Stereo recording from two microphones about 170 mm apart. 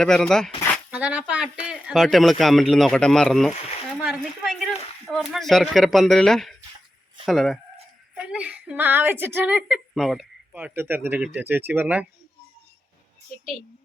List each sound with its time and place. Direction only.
0.0 s speech: 5° left (ahead or behind)
0.9 s a woman's voice: 5° right (ahead or behind)